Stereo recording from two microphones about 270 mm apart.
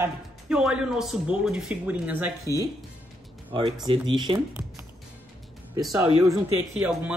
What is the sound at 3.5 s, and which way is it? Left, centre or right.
Speech, centre.